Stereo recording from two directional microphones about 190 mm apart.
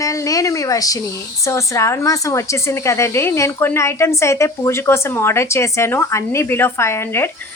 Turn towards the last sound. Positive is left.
turn(degrees=15)  # may be behind; listen again after turning